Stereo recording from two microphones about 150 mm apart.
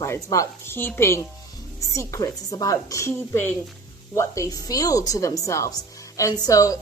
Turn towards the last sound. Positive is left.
turn(degrees=20)  # may be behind; listen again after turning